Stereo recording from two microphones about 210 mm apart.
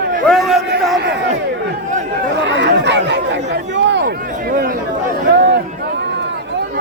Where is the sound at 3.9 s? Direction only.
55° right (ahead or behind).